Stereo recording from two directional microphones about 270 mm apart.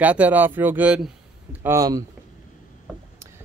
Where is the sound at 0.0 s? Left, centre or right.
Centre.